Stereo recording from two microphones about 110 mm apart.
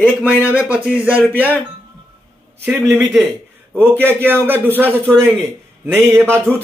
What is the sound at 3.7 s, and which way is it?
A man's voice, 20° right (ahead or behind).